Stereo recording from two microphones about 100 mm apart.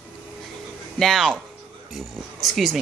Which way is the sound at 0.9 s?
Centre (ahead or behind).